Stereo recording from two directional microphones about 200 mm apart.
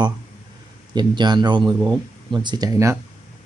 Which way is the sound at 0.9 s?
20° right (ahead or behind).